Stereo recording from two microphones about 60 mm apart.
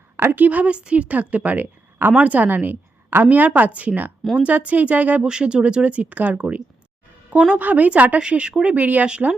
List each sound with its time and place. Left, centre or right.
0.2 s a woman's voice: right
5.2 s a woman's voice: centre